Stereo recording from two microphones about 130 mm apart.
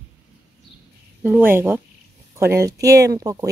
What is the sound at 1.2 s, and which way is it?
A woman's voice, 15° right (ahead or behind).